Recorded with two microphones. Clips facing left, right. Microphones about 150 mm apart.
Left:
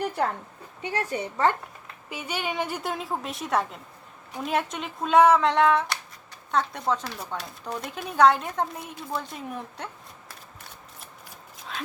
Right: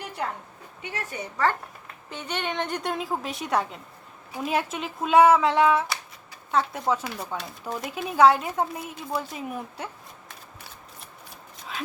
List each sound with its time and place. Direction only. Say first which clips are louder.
0.8 s a woman's voice: left 6 dB; 30° left (ahead or behind)
2.0 s speech: even; 10° left (ahead or behind)
11.7 s dog: right 1 dB; centre (ahead or behind)